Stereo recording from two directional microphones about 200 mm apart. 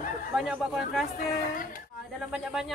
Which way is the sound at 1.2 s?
45° left (ahead or behind).